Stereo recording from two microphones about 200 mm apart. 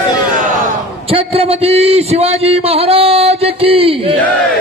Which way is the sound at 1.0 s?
30° right (ahead or behind).